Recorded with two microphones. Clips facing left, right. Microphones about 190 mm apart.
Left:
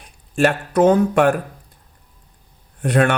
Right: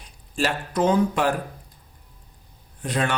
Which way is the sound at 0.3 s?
55° left (ahead or behind).